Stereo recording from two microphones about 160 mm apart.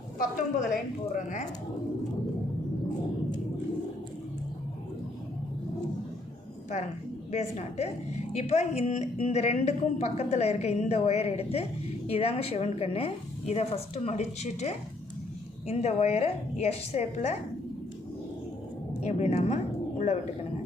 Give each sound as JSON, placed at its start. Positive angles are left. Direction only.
{"t": 0.2, "sound": "a woman's voice", "side_deg": 55}
{"t": 7.3, "sound": "a woman's voice", "side_deg": 45}
{"t": 18.9, "sound": "speech", "side_deg": 45}